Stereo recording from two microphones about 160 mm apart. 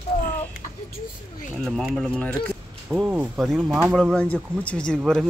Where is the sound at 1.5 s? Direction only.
Centre (ahead or behind).